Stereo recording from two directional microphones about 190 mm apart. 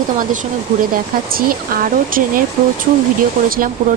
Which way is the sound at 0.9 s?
50° right (ahead or behind).